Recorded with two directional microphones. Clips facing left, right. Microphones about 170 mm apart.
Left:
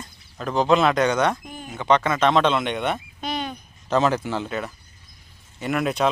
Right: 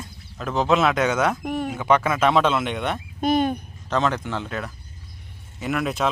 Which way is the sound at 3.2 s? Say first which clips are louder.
Right 9 dB; 50° right (ahead or behind).